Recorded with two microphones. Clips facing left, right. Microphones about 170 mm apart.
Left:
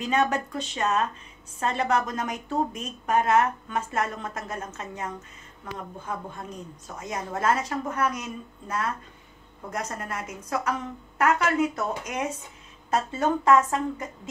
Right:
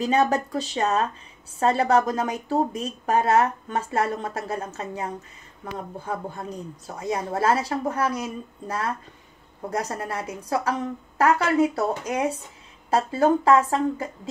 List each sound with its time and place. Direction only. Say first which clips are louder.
0.0 s a woman's voice: right 4 dB; 35° right (ahead or behind)